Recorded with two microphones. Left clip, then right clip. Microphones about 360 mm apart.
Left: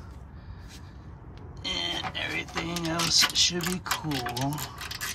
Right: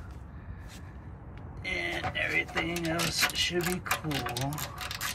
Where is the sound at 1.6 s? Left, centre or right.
Left.